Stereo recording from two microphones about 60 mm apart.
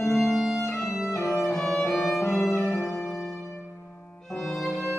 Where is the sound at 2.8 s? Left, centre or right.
Left.